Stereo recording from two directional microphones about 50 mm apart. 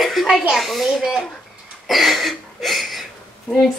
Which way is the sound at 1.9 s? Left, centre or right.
Centre.